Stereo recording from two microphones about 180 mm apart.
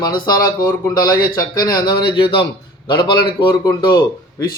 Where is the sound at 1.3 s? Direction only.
20° left (ahead or behind).